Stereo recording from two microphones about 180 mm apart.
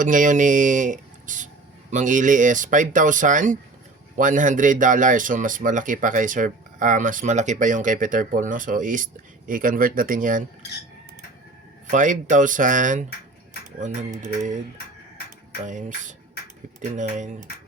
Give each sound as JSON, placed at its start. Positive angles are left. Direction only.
{"t": 0.0, "sound": "speech", "side_deg": -45}
{"t": 11.9, "sound": "speech", "side_deg": -45}
{"t": 15.6, "sound": "speech", "side_deg": -45}